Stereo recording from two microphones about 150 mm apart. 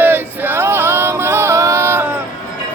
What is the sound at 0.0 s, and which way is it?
Music, 15° right (ahead or behind).